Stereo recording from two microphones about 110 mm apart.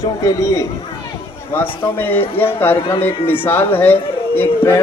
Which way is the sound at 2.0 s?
20° left (ahead or behind).